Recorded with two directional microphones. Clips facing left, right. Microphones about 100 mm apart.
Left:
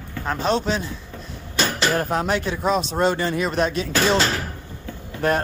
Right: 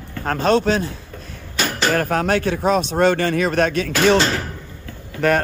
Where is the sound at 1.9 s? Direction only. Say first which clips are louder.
Right 3 dB; 60° right (ahead or behind).